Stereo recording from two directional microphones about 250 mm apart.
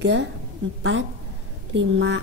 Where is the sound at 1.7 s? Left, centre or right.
Right.